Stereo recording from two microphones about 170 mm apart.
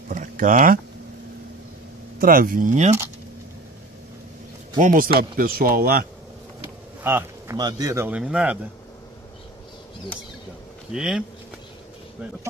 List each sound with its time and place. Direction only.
0.1 s a sound: 55° right (ahead or behind)
2.1 s speech: 60° right (ahead or behind)
4.7 s speech: 50° right (ahead or behind)
7.0 s speech: 15° right (ahead or behind)
8.2 s speech: 5° right (ahead or behind)
10.9 s speech: 5° right (ahead or behind)